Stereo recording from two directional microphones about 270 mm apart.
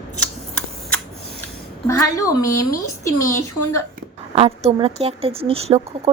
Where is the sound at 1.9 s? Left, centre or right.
Centre.